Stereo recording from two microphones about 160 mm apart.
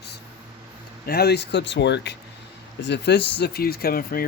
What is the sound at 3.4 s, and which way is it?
Speech, 75° left (ahead or behind).